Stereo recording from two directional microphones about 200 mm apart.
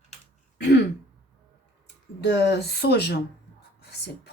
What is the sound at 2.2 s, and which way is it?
Speech, 55° left (ahead or behind).